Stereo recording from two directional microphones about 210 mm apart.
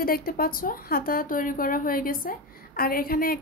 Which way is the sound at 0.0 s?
45° left (ahead or behind).